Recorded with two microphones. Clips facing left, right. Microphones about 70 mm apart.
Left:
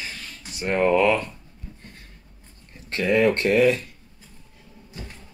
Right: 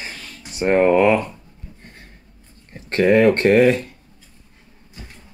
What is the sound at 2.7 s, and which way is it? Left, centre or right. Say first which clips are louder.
Speech: right 7 dB; right.